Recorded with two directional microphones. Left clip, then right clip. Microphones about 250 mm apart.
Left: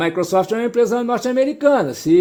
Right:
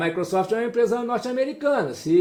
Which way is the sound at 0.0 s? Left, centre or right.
Left.